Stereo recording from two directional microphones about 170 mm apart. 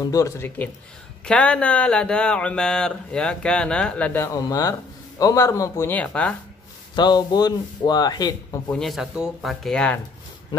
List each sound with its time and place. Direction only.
0.0 s a man's voice: 20° left (ahead or behind)
7.0 s a man's voice: 25° left (ahead or behind)
8.6 s speech: centre (ahead or behind)